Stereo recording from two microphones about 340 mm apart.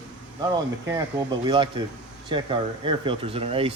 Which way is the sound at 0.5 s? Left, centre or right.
Centre.